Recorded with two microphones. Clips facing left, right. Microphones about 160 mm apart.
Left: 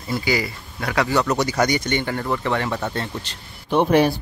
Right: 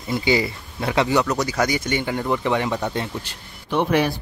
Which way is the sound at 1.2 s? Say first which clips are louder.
Left 2 dB; centre (ahead or behind).